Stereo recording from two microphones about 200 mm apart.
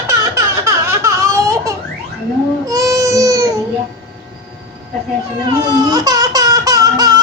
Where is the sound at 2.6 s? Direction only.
15° right (ahead or behind).